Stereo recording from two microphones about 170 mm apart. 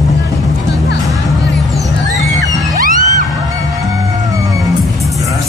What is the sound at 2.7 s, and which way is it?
Music, 55° right (ahead or behind).